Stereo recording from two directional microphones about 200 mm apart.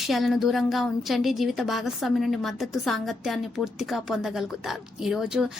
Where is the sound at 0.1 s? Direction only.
Centre (ahead or behind).